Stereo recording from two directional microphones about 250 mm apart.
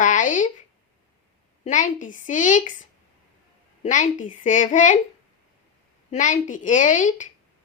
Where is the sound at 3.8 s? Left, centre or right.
Left.